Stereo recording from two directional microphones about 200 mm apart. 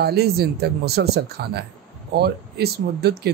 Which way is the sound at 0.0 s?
55° right (ahead or behind).